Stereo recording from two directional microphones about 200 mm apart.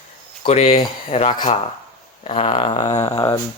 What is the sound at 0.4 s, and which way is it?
Speech, 30° left (ahead or behind).